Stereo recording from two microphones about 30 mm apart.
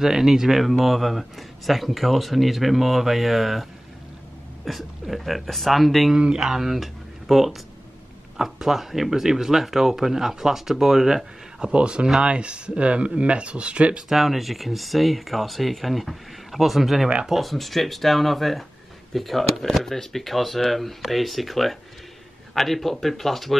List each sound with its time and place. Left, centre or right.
0.0 s speech: centre
0.6 s speech: centre
4.7 s speech: centre
6.1 s speech: right
6.5 s speech: centre
6.8 s a sound: centre
8.4 s speech: centre
11.7 s speech: right
14.0 s a man's voice: centre